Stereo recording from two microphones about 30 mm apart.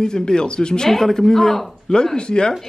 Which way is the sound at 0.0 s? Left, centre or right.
Left.